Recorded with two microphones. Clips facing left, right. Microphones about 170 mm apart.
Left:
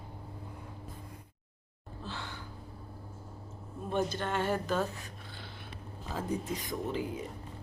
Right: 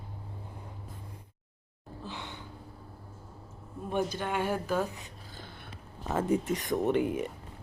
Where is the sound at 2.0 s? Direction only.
15° right (ahead or behind).